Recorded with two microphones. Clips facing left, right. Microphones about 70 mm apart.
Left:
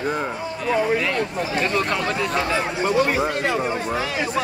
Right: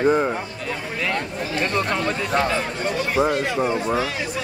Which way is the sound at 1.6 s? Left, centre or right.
Centre.